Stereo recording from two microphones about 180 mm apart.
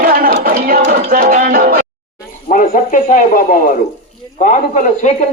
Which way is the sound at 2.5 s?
45° left (ahead or behind).